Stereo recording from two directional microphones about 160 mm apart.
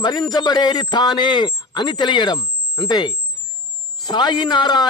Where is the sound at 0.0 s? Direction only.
25° left (ahead or behind).